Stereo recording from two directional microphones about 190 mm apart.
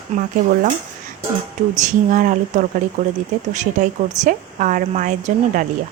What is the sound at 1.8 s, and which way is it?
Speech, 40° right (ahead or behind).